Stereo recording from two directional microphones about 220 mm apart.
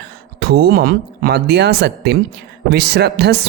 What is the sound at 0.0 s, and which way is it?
Speech, 50° right (ahead or behind).